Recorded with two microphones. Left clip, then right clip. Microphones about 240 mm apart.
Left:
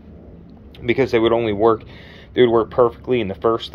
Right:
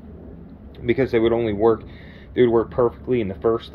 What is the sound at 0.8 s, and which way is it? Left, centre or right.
Speech, centre.